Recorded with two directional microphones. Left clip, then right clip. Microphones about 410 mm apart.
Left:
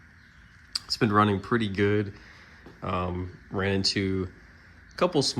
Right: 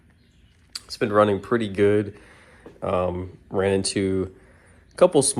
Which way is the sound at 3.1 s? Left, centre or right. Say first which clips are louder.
Right 4 dB; right.